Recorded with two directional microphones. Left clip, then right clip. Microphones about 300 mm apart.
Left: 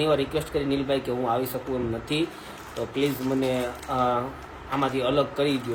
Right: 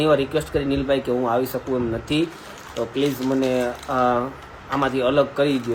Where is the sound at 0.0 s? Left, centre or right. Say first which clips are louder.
Right 5 dB; centre.